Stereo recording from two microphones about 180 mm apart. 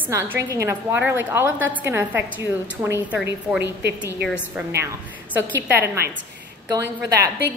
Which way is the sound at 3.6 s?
70° right (ahead or behind).